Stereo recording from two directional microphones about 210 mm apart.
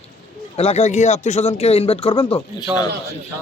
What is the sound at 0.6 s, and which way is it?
Speech, 30° left (ahead or behind).